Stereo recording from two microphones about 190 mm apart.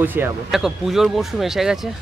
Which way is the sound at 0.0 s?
10° right (ahead or behind).